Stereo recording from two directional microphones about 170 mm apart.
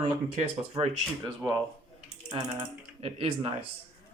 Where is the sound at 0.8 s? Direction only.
25° right (ahead or behind).